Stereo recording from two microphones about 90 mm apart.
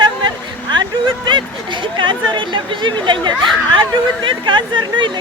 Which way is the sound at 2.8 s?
60° right (ahead or behind).